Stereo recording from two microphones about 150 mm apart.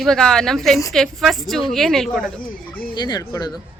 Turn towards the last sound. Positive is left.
turn(degrees=25)  # may be behind; listen again after turning